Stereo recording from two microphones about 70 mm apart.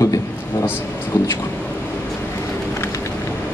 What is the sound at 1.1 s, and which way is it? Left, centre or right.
Speech, left.